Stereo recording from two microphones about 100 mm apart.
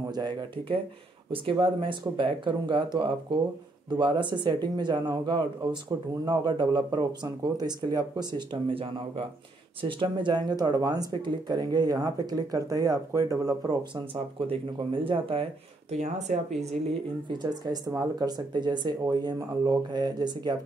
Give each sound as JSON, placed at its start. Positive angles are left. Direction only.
{"t": 0.1, "sound": "speech", "side_deg": -50}
{"t": 9.8, "sound": "speech", "side_deg": -55}
{"t": 14.5, "sound": "speech", "side_deg": -65}
{"t": 15.9, "sound": "speech", "side_deg": -90}
{"t": 17.3, "sound": "speech", "side_deg": -45}